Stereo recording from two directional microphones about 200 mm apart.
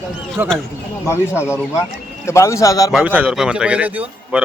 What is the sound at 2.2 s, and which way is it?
Speech, 15° left (ahead or behind).